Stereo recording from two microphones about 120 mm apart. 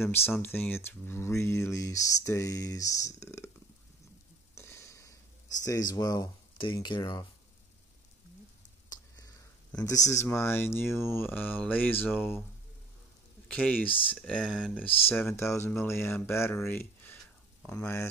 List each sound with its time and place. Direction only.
0.4 s speech: 15° left (ahead or behind)
4.6 s a sound: 25° left (ahead or behind)
5.6 s speech: 30° left (ahead or behind)
9.8 s speech: 30° left (ahead or behind)
13.5 s speech: 10° left (ahead or behind)
14.4 s speech: 10° right (ahead or behind)
14.8 s speech: 15° left (ahead or behind)